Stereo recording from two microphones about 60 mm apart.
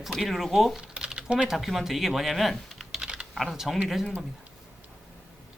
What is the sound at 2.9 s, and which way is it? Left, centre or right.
Typing, centre.